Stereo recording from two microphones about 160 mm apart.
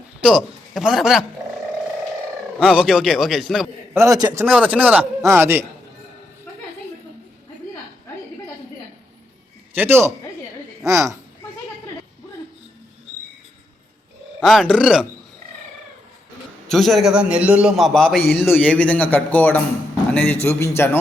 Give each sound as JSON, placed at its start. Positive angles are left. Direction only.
{"t": 0.3, "sound": "a man's voice", "side_deg": 0}
{"t": 2.6, "sound": "a man's voice", "side_deg": 0}
{"t": 3.9, "sound": "a man's voice", "side_deg": -20}
{"t": 9.7, "sound": "a man's voice", "side_deg": -15}
{"t": 14.4, "sound": "a man's voice", "side_deg": 0}
{"t": 16.6, "sound": "a man's voice", "side_deg": 0}